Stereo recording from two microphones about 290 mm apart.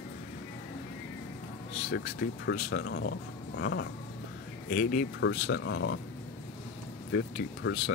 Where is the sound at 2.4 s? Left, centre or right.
Left.